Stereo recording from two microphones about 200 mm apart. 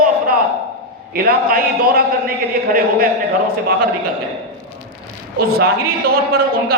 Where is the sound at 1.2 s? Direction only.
45° right (ahead or behind).